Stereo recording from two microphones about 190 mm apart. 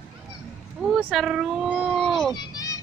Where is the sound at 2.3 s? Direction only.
20° left (ahead or behind).